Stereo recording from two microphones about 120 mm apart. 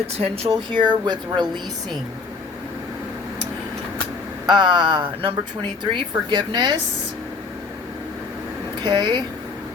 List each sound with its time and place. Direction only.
0.2 s speech: 55° right (ahead or behind)
0.7 s a woman's voice: 40° right (ahead or behind)
4.4 s a woman's voice: 40° right (ahead or behind)
8.8 s a woman's voice: 40° right (ahead or behind)